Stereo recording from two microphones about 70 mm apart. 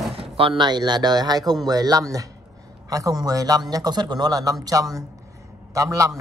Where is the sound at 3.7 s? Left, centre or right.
Right.